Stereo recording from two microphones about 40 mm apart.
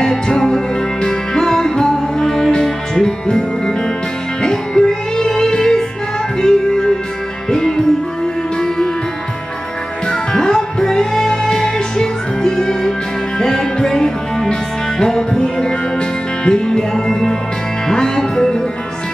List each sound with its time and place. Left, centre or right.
0.0 s music: centre
10.3 s music: centre